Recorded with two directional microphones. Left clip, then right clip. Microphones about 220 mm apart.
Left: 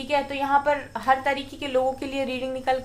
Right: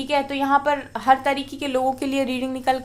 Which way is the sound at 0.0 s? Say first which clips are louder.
Right 3 dB; 50° right (ahead or behind).